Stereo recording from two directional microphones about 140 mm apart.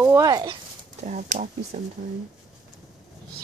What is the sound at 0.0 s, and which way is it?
Speech, 20° right (ahead or behind).